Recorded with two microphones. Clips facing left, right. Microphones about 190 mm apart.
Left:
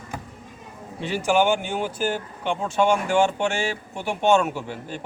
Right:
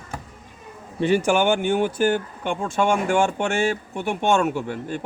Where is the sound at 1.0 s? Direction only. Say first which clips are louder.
Right 2 dB; 55° right (ahead or behind).